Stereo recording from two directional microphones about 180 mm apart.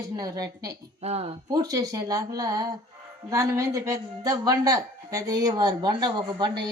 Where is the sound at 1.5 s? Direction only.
20° right (ahead or behind).